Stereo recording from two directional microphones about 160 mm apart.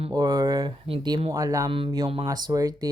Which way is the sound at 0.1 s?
25° right (ahead or behind).